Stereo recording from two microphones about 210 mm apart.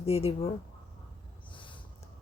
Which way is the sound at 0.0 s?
30° left (ahead or behind).